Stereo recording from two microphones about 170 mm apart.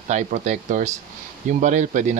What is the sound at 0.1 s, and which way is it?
Speech, 45° right (ahead or behind).